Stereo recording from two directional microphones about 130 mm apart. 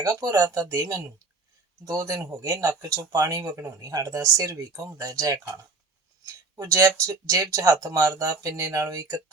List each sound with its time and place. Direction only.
0.0 s speech: 25° right (ahead or behind)